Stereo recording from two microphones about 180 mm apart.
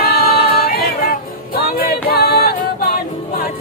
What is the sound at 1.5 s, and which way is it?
Music, 55° left (ahead or behind).